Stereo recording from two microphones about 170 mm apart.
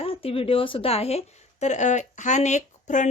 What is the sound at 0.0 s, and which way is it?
A woman's voice, 35° left (ahead or behind).